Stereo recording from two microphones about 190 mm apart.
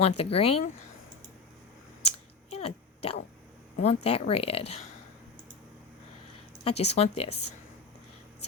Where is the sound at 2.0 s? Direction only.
30° left (ahead or behind).